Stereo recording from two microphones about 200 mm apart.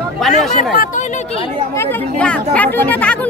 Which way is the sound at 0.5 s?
40° left (ahead or behind).